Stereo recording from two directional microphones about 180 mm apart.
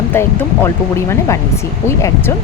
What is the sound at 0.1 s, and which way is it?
Speech, 15° left (ahead or behind).